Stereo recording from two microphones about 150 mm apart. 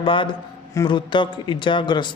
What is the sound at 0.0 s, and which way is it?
A man's voice, 35° left (ahead or behind).